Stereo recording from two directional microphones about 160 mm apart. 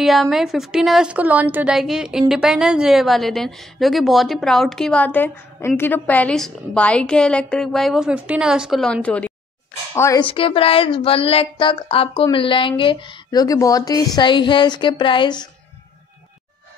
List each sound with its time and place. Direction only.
0.0 s a woman's voice: centre (ahead or behind)
9.9 s speech: 20° left (ahead or behind)
10.2 s speech: 35° left (ahead or behind)